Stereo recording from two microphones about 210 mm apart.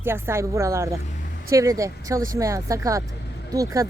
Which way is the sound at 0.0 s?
10° right (ahead or behind).